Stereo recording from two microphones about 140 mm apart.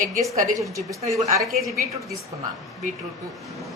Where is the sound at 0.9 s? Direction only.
25° right (ahead or behind).